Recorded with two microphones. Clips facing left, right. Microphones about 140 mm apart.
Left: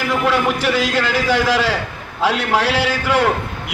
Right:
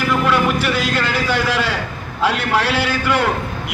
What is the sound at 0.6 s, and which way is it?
A man's voice, 90° left.